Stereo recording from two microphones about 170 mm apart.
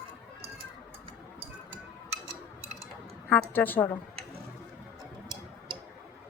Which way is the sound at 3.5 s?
10° left (ahead or behind).